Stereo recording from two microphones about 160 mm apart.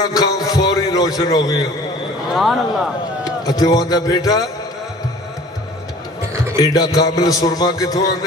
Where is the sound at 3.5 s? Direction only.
25° left (ahead or behind).